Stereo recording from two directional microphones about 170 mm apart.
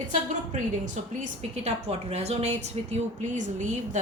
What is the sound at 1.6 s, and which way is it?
A woman's voice, 40° right (ahead or behind).